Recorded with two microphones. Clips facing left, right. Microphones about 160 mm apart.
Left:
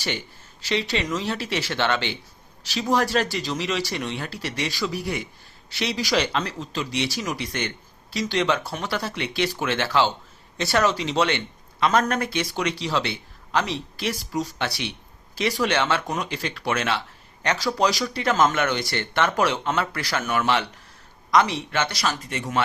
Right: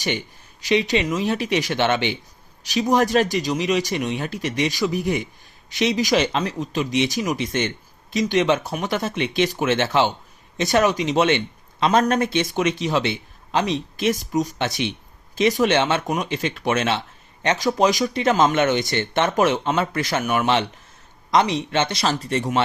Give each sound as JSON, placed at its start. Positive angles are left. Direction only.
{"t": 0.6, "sound": "a man's voice", "side_deg": -15}